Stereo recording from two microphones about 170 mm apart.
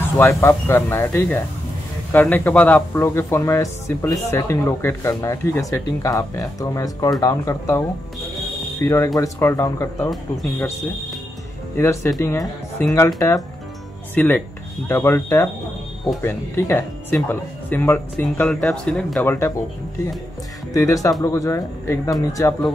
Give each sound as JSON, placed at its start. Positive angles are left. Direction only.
{"t": 0.2, "sound": "speech", "side_deg": 15}
{"t": 8.8, "sound": "speech", "side_deg": 15}
{"t": 11.7, "sound": "speech", "side_deg": 15}
{"t": 14.1, "sound": "speech", "side_deg": 10}
{"t": 19.2, "sound": "speech", "side_deg": 15}
{"t": 20.7, "sound": "speech", "side_deg": 20}